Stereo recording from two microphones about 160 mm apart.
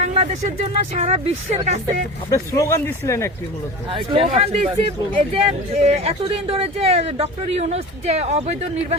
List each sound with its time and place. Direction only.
0.0 s a sound: 45° right (ahead or behind)
0.9 s speech: 45° right (ahead or behind)
2.3 s speech: 20° left (ahead or behind)
3.8 s speech: 35° right (ahead or behind)